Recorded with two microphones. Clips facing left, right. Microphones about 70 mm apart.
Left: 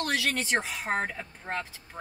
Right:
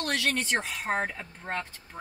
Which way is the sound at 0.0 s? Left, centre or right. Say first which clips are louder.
Even; centre.